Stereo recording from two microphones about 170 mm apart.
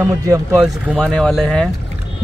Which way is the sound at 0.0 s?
15° right (ahead or behind).